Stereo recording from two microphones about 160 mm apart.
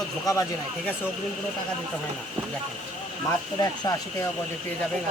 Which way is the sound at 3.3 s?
25° left (ahead or behind).